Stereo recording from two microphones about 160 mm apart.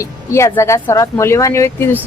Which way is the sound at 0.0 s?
20° left (ahead or behind).